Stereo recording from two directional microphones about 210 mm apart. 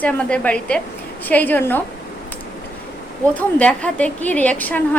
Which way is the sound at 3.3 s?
5° left (ahead or behind).